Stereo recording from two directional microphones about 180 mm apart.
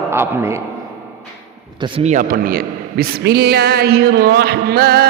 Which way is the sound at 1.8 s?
35° right (ahead or behind).